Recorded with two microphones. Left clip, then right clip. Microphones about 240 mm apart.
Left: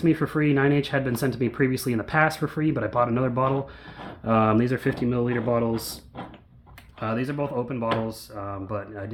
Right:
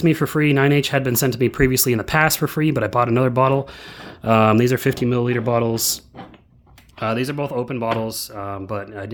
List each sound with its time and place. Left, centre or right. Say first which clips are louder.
0.0 s speech: right 4 dB; right
7.0 s speech: right 5 dB; right